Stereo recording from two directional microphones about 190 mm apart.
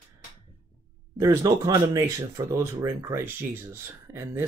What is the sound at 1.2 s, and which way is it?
Speech, 15° right (ahead or behind).